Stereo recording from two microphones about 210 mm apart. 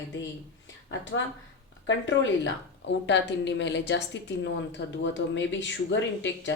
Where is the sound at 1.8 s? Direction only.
60° left (ahead or behind).